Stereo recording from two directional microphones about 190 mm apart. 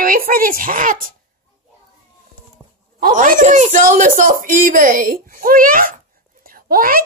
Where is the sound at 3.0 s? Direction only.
45° right (ahead or behind).